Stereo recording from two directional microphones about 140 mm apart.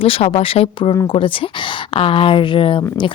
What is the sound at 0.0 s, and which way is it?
A woman's voice, 45° left (ahead or behind).